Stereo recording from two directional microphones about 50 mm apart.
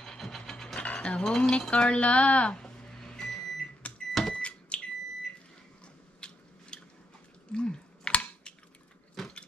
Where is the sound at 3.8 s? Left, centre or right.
Left.